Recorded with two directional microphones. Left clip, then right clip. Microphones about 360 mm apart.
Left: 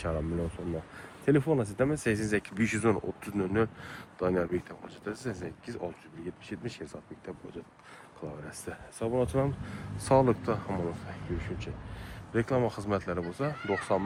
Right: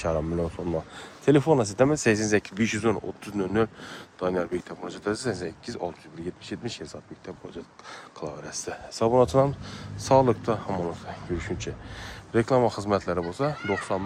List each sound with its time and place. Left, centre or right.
0.0 s speech: centre